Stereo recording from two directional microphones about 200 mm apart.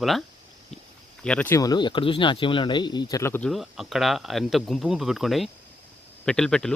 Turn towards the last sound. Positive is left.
turn(degrees=5)  # may be behind; listen again after turning